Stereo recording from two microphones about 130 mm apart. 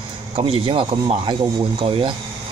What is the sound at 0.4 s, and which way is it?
Speech, 45° right (ahead or behind).